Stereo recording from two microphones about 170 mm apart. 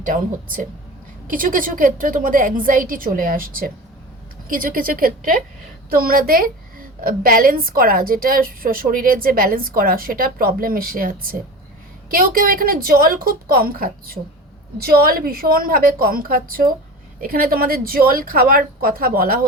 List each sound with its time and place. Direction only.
0.0 s a woman's voice: 50° right (ahead or behind)